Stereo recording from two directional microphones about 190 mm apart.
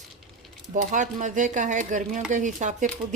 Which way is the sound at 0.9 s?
40° right (ahead or behind).